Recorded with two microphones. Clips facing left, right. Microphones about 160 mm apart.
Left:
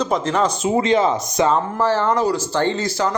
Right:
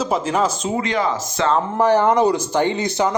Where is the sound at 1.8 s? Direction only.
15° right (ahead or behind).